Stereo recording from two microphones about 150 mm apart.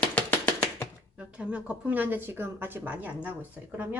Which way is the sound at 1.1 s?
5° right (ahead or behind).